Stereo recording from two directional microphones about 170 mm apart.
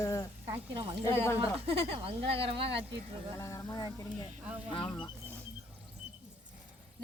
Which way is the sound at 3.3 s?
15° left (ahead or behind).